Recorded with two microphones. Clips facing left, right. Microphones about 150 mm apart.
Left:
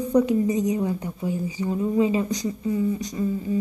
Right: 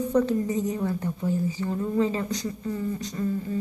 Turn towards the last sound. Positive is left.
turn(degrees=10)  # may be behind; listen again after turning